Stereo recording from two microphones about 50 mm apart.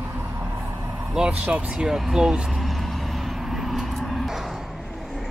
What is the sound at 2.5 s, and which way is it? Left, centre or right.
Vehicle, centre.